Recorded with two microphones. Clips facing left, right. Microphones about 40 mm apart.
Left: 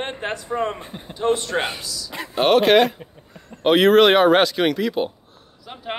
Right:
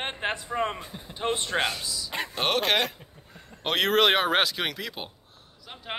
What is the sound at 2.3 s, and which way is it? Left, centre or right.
Speech, centre.